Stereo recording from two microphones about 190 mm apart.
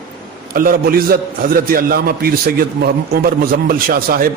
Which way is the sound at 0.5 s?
50° right (ahead or behind).